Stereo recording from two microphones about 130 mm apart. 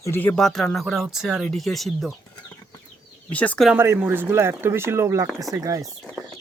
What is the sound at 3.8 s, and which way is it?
Speech, 20° right (ahead or behind).